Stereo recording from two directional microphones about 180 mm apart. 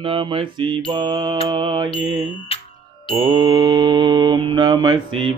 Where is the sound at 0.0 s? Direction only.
30° right (ahead or behind).